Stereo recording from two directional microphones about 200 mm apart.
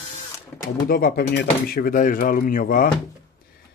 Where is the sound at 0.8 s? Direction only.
50° left (ahead or behind).